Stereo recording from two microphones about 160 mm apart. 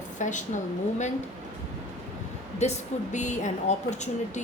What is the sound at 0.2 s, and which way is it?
Speech, 50° left (ahead or behind).